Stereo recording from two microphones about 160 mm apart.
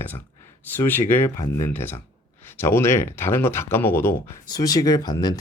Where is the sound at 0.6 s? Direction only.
15° left (ahead or behind).